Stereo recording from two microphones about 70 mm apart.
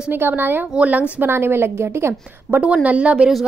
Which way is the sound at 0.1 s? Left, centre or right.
Right.